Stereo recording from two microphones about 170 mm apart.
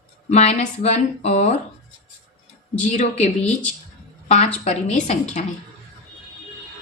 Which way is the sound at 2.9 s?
40° left (ahead or behind).